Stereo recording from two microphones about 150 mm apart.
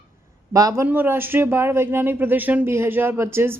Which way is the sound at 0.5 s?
20° right (ahead or behind).